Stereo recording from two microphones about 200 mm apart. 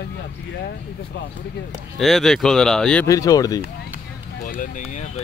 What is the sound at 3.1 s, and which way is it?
Speech, 15° left (ahead or behind).